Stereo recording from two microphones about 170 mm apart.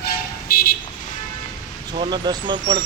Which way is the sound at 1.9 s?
25° right (ahead or behind).